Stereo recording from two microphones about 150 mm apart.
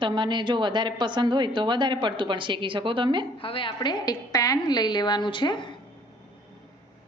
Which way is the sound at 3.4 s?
35° left (ahead or behind).